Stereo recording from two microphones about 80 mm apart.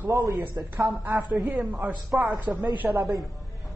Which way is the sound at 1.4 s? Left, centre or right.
Centre.